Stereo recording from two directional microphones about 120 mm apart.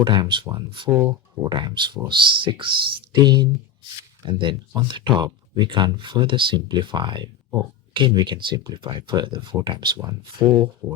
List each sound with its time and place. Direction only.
0.0 s speech: 40° right (ahead or behind)